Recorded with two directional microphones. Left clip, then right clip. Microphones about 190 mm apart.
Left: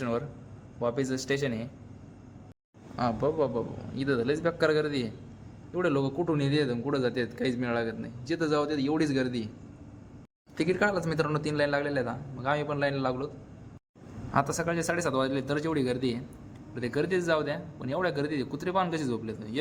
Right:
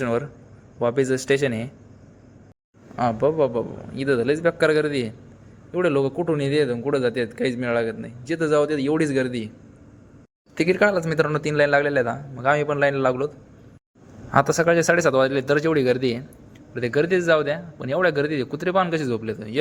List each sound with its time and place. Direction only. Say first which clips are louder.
0.0 s a man's voice: right 8 dB; 30° right (ahead or behind)
2.9 s a man's voice: right 8 dB; 20° right (ahead or behind)
10.5 s a man's voice: right 8 dB; 30° right (ahead or behind)